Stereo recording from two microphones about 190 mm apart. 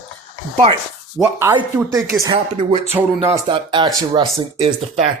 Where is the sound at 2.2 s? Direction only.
30° right (ahead or behind).